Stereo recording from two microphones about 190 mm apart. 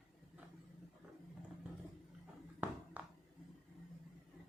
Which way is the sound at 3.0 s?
10° right (ahead or behind).